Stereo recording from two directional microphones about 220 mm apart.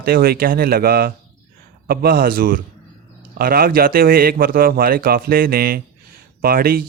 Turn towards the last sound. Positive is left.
turn(degrees=-40)  # may be behind; listen again after turning